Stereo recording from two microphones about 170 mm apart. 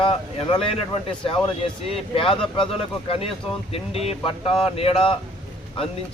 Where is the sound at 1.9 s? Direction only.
30° left (ahead or behind).